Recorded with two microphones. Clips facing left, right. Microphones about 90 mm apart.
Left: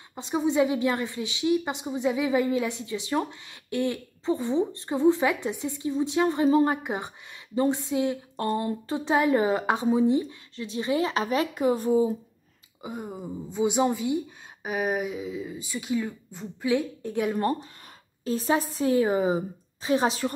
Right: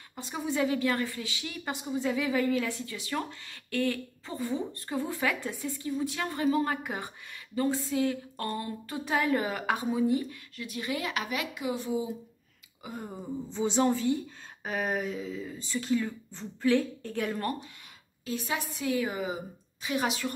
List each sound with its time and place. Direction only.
0.1 s a woman's voice: 25° left (ahead or behind); by 12.1 s 40° left (ahead or behind)
12.8 s speech: 15° left (ahead or behind)
18.2 s a woman's voice: 35° left (ahead or behind)